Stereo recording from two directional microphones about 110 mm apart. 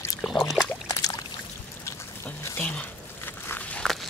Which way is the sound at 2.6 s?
15° left (ahead or behind).